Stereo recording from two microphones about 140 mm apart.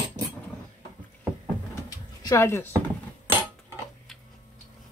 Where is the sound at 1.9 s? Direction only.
25° left (ahead or behind).